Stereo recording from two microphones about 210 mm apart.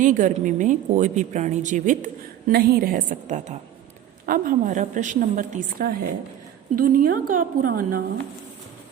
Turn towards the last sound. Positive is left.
turn(degrees=-40)  # may be behind; listen again after turning